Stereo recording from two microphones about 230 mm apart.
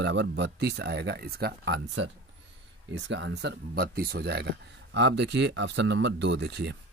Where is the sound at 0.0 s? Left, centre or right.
Right.